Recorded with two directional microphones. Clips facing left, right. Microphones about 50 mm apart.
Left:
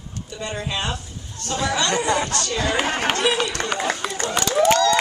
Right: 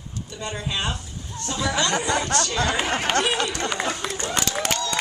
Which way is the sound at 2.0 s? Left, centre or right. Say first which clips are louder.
Left 3 dB; left.